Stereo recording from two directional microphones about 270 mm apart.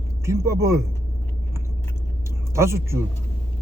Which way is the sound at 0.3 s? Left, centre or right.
Centre.